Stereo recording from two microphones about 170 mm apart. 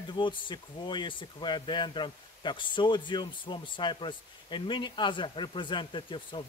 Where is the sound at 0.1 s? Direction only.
30° left (ahead or behind).